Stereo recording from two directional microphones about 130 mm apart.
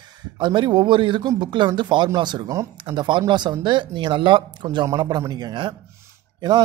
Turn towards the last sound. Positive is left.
turn(degrees=-35)  # may be behind; listen again after turning